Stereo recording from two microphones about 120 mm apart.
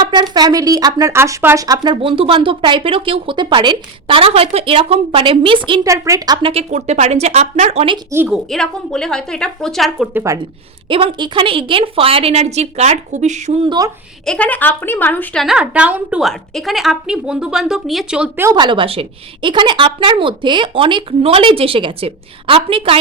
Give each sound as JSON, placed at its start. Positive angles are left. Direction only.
{"t": 0.0, "sound": "speech", "side_deg": -35}
{"t": 1.6, "sound": "a woman's voice", "side_deg": -35}
{"t": 5.8, "sound": "speech", "side_deg": -25}
{"t": 6.5, "sound": "speech", "side_deg": -65}
{"t": 8.3, "sound": "a woman's voice", "side_deg": 5}
{"t": 10.3, "sound": "speech", "side_deg": -25}
{"t": 10.8, "sound": "a woman's voice", "side_deg": -45}
{"t": 13.7, "sound": "speech", "side_deg": -30}
{"t": 14.3, "sound": "speech", "side_deg": 10}
{"t": 15.4, "sound": "a woman's voice", "side_deg": -5}
{"t": 16.2, "sound": "a woman's voice", "side_deg": 0}
{"t": 18.5, "sound": "a woman's voice", "side_deg": -40}